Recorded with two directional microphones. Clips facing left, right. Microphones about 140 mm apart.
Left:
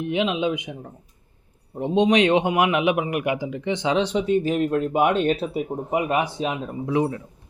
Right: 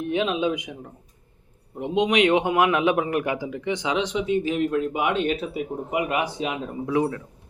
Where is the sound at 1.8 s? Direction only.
30° left (ahead or behind).